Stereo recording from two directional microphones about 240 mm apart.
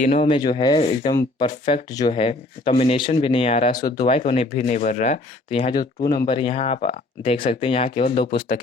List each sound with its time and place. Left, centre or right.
0.0 s speech: left
4.0 s speech: left